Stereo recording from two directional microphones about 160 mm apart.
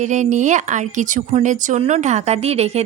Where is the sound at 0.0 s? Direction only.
50° right (ahead or behind).